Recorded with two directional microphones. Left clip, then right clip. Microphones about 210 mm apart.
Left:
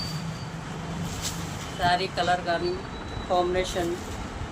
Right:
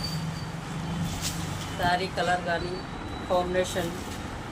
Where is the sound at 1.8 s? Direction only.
30° left (ahead or behind).